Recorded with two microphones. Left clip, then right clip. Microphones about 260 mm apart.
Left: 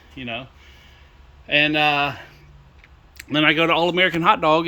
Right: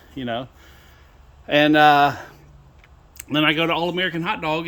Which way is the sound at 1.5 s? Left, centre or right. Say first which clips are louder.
Right 4 dB; centre.